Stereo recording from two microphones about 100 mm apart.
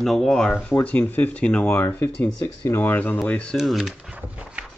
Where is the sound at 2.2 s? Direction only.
35° left (ahead or behind); by 3.5 s 10° left (ahead or behind).